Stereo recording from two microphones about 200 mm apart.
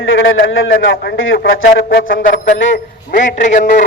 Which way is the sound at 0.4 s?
80° left.